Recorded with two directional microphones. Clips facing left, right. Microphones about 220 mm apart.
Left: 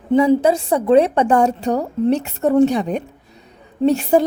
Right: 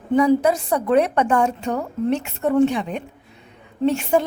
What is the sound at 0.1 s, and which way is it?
A woman's voice, 25° left (ahead or behind).